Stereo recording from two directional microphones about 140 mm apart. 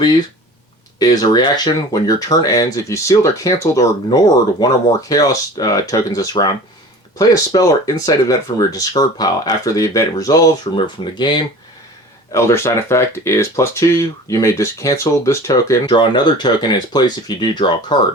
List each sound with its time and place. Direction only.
0.9 s speech: 25° left (ahead or behind)
12.3 s speech: 20° left (ahead or behind)